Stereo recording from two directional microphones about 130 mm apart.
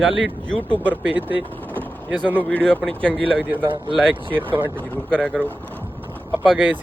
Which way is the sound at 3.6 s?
40° right (ahead or behind).